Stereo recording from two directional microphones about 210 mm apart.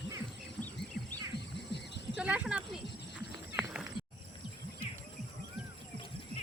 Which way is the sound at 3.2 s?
5° right (ahead or behind).